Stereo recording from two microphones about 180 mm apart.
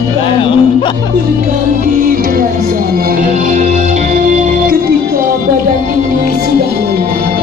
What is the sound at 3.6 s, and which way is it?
Music, 40° right (ahead or behind).